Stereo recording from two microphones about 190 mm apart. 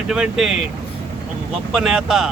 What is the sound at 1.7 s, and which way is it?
Speech, 5° right (ahead or behind).